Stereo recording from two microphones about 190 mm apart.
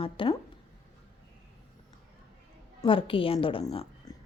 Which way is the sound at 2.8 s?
30° left (ahead or behind).